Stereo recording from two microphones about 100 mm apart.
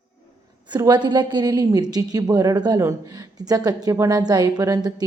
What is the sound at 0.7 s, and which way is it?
A woman's voice, 45° right (ahead or behind).